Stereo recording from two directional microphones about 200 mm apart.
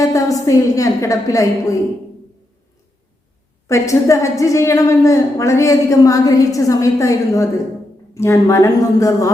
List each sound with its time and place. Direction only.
0.0 s a woman's voice: 15° left (ahead or behind)
3.7 s a woman's voice: 15° left (ahead or behind)